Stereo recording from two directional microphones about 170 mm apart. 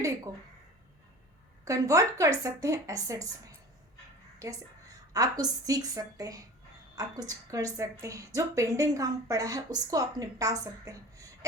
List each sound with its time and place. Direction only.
1.6 s a woman's voice: 20° right (ahead or behind)
4.4 s a woman's voice: 20° right (ahead or behind)